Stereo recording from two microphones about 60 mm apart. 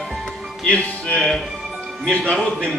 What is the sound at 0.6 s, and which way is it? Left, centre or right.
Speech, centre.